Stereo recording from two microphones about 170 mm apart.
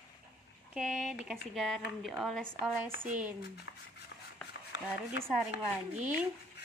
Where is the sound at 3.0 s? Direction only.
5° right (ahead or behind).